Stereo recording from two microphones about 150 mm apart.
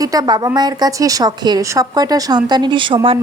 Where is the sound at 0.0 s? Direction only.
25° right (ahead or behind).